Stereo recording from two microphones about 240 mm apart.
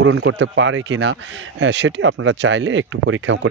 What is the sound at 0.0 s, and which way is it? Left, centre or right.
Speech, right.